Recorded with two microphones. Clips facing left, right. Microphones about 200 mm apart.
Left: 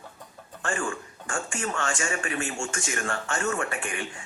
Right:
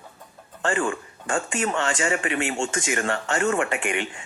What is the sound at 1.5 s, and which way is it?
Speech, 80° right.